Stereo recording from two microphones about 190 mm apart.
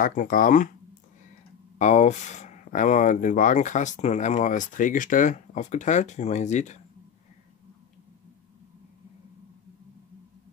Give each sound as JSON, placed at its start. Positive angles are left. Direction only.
{"t": 0.0, "sound": "speech", "side_deg": 45}
{"t": 1.8, "sound": "speech", "side_deg": 40}